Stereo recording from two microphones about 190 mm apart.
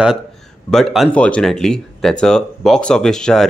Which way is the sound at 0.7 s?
5° left (ahead or behind).